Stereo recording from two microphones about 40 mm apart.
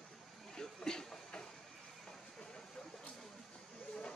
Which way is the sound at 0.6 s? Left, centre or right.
Centre.